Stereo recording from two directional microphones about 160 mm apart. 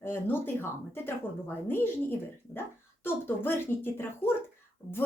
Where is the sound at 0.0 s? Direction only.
15° left (ahead or behind).